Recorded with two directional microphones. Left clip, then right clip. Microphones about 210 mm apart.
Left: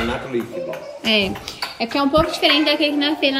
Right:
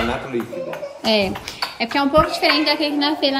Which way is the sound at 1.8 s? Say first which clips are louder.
Right 1 dB; 5° right (ahead or behind).